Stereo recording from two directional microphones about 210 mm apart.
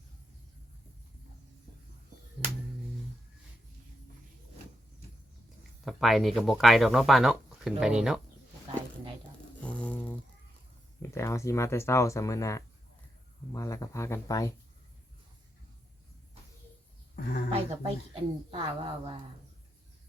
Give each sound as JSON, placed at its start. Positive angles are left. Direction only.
{"t": 2.4, "sound": "finger snapping", "side_deg": 0}
{"t": 5.8, "sound": "speech", "side_deg": 0}
{"t": 9.6, "sound": "a sound", "side_deg": 5}
{"t": 11.1, "sound": "speech", "side_deg": 15}
{"t": 17.5, "sound": "speech", "side_deg": -25}